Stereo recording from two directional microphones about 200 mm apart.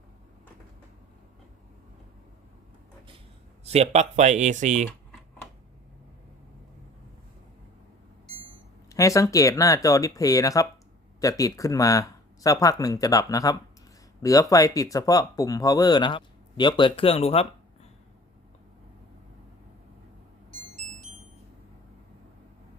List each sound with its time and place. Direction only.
3.6 s speech: 30° right (ahead or behind)
8.9 s speech: 15° left (ahead or behind)